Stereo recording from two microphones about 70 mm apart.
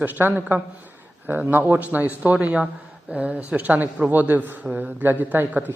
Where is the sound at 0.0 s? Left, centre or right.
Right.